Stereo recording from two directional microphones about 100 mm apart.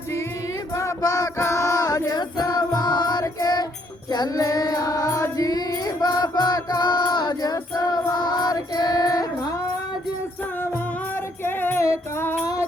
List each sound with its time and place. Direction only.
0.7 s a sound: 30° left (ahead or behind)
1.4 s music: 30° left (ahead or behind)
10.6 s music: 20° left (ahead or behind)